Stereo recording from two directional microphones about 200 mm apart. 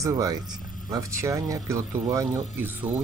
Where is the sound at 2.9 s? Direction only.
10° right (ahead or behind).